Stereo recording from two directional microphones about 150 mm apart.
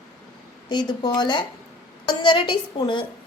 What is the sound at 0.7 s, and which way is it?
A woman's voice, 30° left (ahead or behind).